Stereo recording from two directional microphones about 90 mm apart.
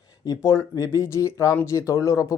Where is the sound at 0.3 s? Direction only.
40° left (ahead or behind).